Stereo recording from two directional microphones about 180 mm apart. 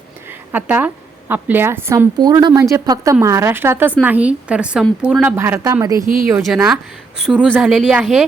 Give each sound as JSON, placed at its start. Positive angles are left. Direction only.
{"t": 0.3, "sound": "a sound", "side_deg": -10}
{"t": 1.3, "sound": "a woman's voice", "side_deg": -10}
{"t": 6.2, "sound": "a woman's voice", "side_deg": -5}